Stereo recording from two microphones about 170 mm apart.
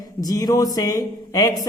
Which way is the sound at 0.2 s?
20° left (ahead or behind).